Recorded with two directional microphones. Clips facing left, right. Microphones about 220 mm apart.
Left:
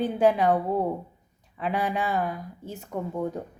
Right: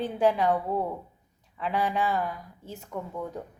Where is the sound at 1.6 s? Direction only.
15° left (ahead or behind).